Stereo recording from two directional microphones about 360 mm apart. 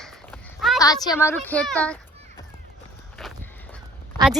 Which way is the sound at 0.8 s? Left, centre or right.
Centre.